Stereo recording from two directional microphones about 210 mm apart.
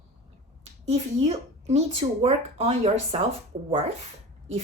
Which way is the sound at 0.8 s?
30° right (ahead or behind).